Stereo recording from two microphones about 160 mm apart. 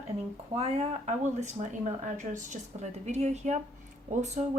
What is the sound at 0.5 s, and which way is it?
Speech, 40° right (ahead or behind).